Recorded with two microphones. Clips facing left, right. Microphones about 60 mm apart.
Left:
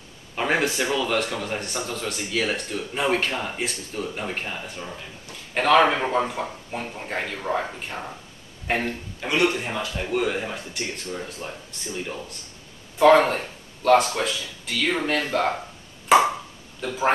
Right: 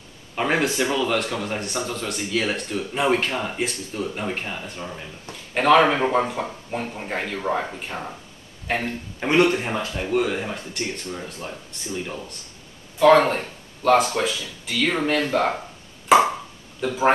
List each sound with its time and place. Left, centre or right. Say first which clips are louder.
0.4 s speech: right 1 dB; centre
9.2 s a man's voice: right 4 dB; right
9.9 s speech: right 2 dB; centre
16.1 s a sound: right 1 dB; centre
16.8 s a man's voice: right 3 dB; centre